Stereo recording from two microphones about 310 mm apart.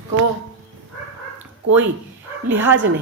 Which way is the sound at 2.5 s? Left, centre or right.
Centre.